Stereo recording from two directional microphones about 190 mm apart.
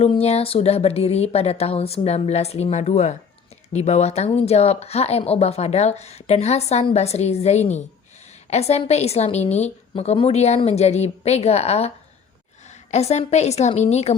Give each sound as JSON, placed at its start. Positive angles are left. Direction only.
{"t": 0.0, "sound": "a woman's voice", "side_deg": 30}
{"t": 12.9, "sound": "a woman's voice", "side_deg": 35}